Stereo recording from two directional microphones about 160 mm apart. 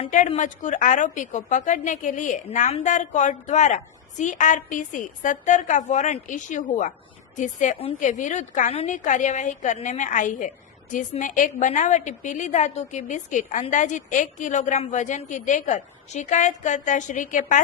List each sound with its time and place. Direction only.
0.3 s a woman's voice: 50° left (ahead or behind)